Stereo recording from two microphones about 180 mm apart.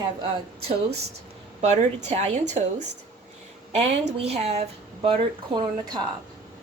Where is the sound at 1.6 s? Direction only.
40° right (ahead or behind).